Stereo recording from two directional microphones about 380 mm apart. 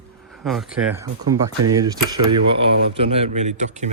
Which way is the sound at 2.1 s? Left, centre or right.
Right.